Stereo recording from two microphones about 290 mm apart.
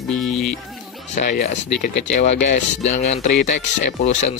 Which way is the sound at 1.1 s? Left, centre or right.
Left.